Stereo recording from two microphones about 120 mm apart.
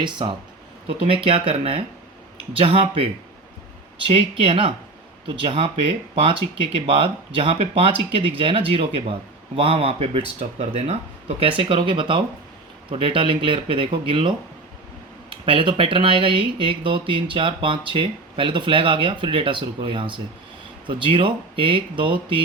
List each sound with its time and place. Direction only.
0.0 s speech: 40° right (ahead or behind)
1.0 s speech: 50° right (ahead or behind)
11.3 s speech: 50° right (ahead or behind)